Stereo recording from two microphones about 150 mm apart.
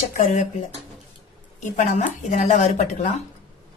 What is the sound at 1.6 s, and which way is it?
Speech, 55° left (ahead or behind).